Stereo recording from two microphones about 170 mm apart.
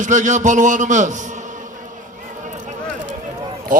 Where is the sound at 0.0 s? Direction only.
45° right (ahead or behind).